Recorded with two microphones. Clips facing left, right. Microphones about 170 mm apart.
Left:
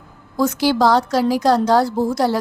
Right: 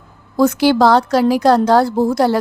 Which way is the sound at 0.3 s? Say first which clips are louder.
Right 4 dB; 60° right (ahead or behind).